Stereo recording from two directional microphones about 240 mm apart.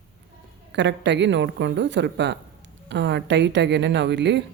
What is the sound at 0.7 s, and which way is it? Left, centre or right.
A woman's voice, right.